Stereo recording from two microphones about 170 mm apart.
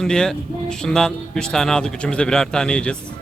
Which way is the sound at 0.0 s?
5° left (ahead or behind).